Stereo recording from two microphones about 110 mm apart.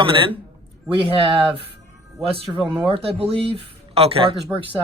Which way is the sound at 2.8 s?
55° right (ahead or behind).